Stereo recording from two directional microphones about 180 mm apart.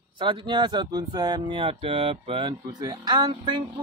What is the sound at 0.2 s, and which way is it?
Speech, 25° right (ahead or behind).